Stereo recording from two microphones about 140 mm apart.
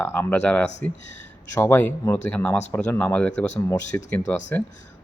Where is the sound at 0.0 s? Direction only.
15° left (ahead or behind).